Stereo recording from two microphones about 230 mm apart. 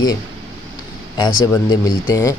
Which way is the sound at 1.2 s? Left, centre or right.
Centre.